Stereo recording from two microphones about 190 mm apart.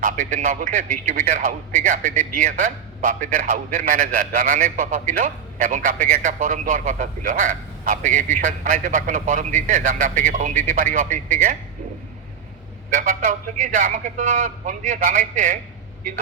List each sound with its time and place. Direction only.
0.0 s a man's voice: 45° right (ahead or behind)
12.9 s a man's voice: 45° right (ahead or behind)